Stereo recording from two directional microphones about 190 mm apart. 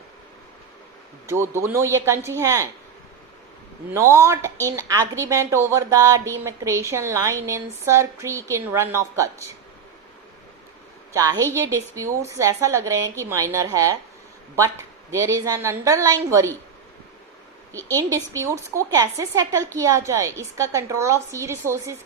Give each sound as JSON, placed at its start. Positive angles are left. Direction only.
{"t": 1.3, "sound": "a woman's voice", "side_deg": -15}
{"t": 3.9, "sound": "a woman's voice", "side_deg": -15}
{"t": 11.1, "sound": "a woman's voice", "side_deg": -15}
{"t": 15.1, "sound": "a woman's voice", "side_deg": -15}
{"t": 17.7, "sound": "a woman's voice", "side_deg": 10}
{"t": 17.9, "sound": "a woman's voice", "side_deg": -15}